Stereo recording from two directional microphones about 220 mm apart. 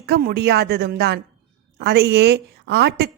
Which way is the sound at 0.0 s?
45° right (ahead or behind).